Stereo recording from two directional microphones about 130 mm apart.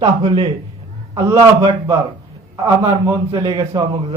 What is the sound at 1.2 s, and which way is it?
Speech, 25° right (ahead or behind).